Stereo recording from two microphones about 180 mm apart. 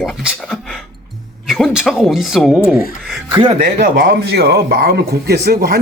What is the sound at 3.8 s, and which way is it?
Speech, 65° right (ahead or behind).